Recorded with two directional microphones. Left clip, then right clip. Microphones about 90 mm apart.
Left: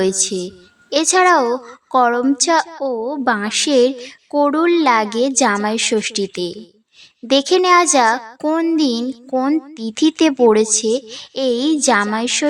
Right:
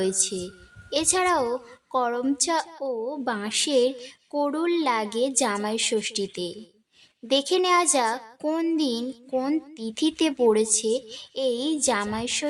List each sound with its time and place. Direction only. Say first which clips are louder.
0.0 s speech: left 8 dB; 40° left (ahead or behind)
9.3 s speech: left 8 dB; 20° left (ahead or behind)
9.7 s speech: left 9 dB; 40° left (ahead or behind)